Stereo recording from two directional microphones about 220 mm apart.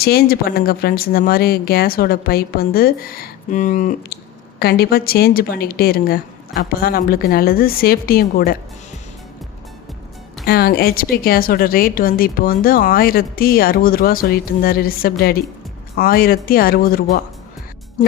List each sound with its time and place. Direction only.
0.0 s speech: 45° left (ahead or behind)
10.4 s a woman's voice: 45° left (ahead or behind)